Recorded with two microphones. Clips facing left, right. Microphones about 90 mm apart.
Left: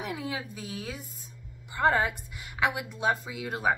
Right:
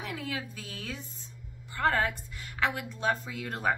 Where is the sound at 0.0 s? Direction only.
20° left (ahead or behind).